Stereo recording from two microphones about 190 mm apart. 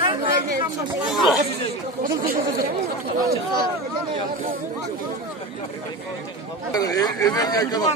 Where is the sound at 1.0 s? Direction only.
Centre (ahead or behind).